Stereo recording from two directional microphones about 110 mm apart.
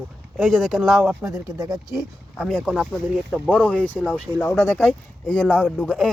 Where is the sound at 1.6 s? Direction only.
35° right (ahead or behind).